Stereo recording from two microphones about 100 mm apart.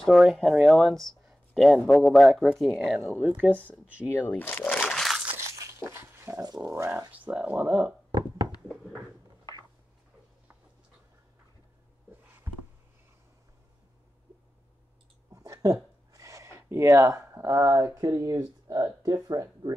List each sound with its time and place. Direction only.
0.0 s speech: centre (ahead or behind)
1.2 s a sound: centre (ahead or behind)
1.9 s speech: 5° left (ahead or behind)
3.2 s speech: 15° right (ahead or behind)
3.5 s speech: 15° left (ahead or behind)
4.8 s crunch: centre (ahead or behind)
5.9 s a sound: 25° right (ahead or behind)
6.4 s speech: 40° right (ahead or behind)
7.1 s speech: 15° right (ahead or behind)
12.5 s a sound: 25° right (ahead or behind)
15.3 s a sound: 35° right (ahead or behind)
18.0 s speech: 35° right (ahead or behind)